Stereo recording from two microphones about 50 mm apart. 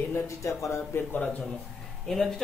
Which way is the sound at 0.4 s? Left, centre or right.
Left.